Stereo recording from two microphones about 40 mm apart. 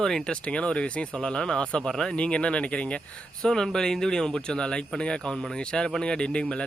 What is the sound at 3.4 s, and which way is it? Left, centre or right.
Speech, centre.